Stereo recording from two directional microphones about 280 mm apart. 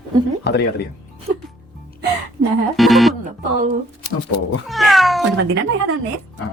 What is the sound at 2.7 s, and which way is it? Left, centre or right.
Music, centre.